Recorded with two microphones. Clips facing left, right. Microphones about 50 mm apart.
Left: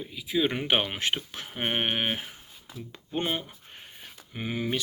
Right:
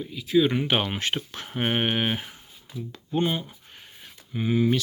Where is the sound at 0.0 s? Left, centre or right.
Centre.